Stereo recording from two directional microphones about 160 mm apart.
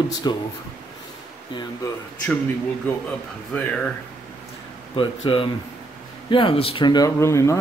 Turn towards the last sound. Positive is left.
turn(degrees=20)  # may be behind; listen again after turning